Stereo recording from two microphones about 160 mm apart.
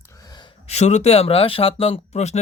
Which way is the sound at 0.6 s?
45° left (ahead or behind).